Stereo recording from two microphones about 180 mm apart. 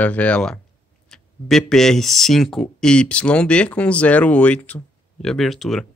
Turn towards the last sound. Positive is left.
turn(degrees=0)  # may be behind; listen again after turning